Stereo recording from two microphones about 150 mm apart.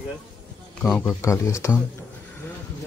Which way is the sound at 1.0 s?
20° left (ahead or behind).